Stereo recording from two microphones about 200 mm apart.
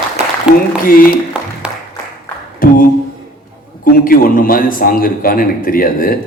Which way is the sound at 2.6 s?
45° left (ahead or behind).